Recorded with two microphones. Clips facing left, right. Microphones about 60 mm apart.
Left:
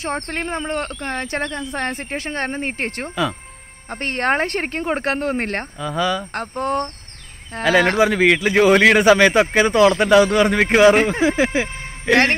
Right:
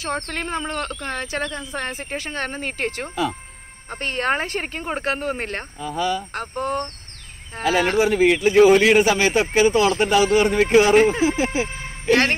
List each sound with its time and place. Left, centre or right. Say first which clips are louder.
0.1 s speech: even; left
3.9 s speech: left 3 dB; left
5.8 s speech: left 1 dB; left
6.4 s speech: left 5 dB; left
7.5 s speech: left 3 dB; left